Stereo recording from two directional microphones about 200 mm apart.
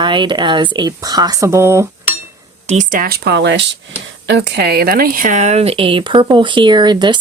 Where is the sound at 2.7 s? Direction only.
40° right (ahead or behind).